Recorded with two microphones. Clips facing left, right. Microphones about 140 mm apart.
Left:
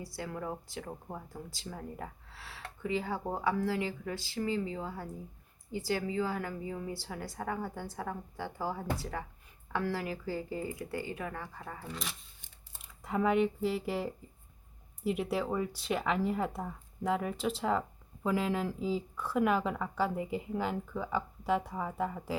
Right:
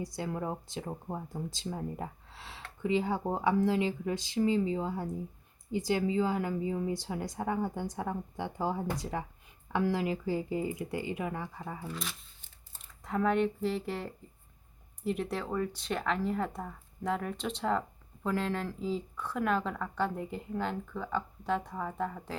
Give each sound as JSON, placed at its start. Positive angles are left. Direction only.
{"t": 0.0, "sound": "speech", "side_deg": -20}